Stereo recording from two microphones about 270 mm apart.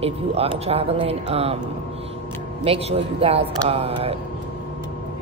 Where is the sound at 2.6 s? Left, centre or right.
Right.